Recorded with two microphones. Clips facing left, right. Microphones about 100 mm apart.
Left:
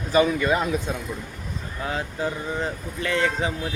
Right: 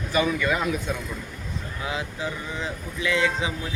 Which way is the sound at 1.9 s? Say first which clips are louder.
Left 3 dB; 45° left (ahead or behind).